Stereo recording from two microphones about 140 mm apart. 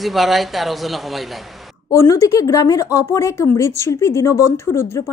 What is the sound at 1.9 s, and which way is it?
Speech, 25° left (ahead or behind).